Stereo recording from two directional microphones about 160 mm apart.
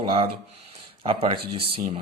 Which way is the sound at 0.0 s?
30° right (ahead or behind).